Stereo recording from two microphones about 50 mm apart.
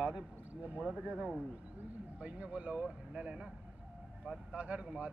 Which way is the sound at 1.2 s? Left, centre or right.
Centre.